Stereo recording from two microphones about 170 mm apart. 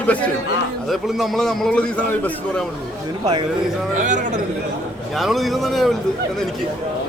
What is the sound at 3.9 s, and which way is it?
Speech, 45° right (ahead or behind).